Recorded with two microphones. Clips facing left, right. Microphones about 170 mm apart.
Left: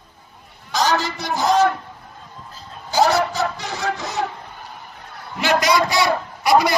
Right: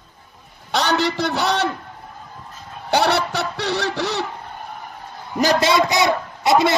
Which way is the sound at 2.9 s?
65° right (ahead or behind).